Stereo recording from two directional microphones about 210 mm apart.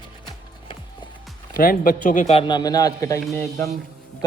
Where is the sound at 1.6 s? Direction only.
40° left (ahead or behind); by 3.2 s 15° left (ahead or behind).